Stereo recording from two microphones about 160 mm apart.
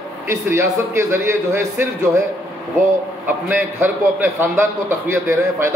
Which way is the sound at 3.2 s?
10° right (ahead or behind).